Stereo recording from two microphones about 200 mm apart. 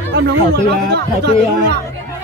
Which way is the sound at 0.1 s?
55° right (ahead or behind).